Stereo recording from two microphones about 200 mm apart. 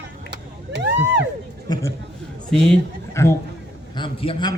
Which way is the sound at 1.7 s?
20° left (ahead or behind).